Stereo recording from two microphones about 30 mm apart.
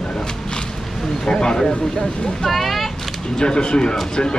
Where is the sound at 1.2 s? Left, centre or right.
Left.